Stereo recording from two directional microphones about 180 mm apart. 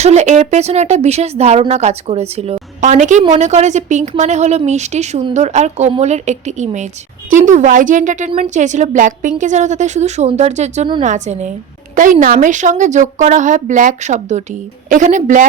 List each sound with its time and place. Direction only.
0.0 s a woman's voice: 40° right (ahead or behind)